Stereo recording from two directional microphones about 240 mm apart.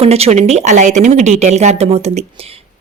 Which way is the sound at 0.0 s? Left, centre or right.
Right.